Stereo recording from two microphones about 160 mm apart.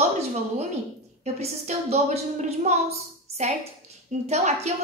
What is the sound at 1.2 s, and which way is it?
A woman's voice, 40° right (ahead or behind).